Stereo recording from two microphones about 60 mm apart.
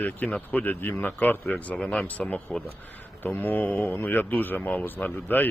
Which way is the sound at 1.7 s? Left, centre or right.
Centre.